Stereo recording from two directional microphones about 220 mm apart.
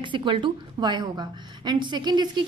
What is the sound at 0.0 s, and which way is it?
A woman's voice, 20° right (ahead or behind).